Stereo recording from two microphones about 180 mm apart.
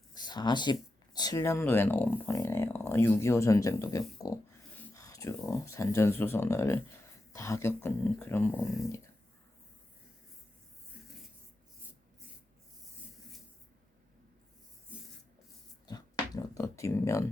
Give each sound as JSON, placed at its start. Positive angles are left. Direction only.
{"t": 0.1, "sound": "speech", "side_deg": 25}
{"t": 14.9, "sound": "rub", "side_deg": -5}
{"t": 15.9, "sound": "a sound", "side_deg": 20}